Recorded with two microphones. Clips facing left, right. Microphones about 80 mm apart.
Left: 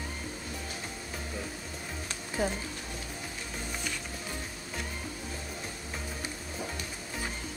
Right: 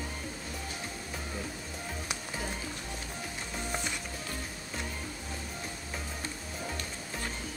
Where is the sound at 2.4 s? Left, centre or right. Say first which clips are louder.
Left 11 dB; left.